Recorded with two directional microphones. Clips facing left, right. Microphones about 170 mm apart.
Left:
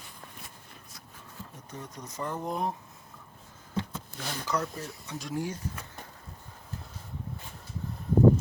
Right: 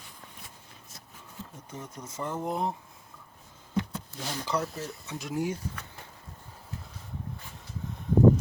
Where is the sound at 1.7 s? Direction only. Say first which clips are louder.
Right 1 dB; 10° right (ahead or behind).